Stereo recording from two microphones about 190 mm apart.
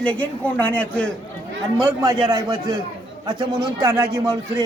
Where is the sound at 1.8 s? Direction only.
20° right (ahead or behind).